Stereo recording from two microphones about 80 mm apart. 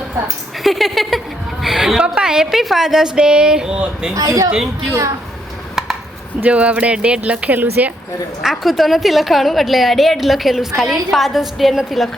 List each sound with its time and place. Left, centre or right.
0.6 s a woman's voice: centre
4.1 s speech: right
6.4 s a woman's voice: centre
8.4 s a woman's voice: centre